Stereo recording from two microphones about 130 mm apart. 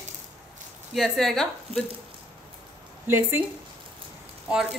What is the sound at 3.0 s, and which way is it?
Speech, 15° right (ahead or behind).